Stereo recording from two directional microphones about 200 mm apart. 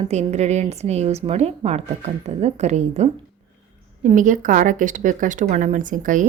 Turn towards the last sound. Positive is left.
turn(degrees=-40)  # may be behind; listen again after turning